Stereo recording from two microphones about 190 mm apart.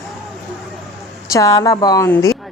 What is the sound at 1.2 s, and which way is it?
A woman's voice, 15° left (ahead or behind).